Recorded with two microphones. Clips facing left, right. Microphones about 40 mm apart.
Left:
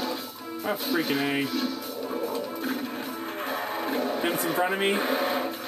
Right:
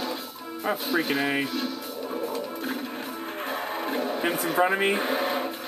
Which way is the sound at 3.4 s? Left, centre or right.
Centre.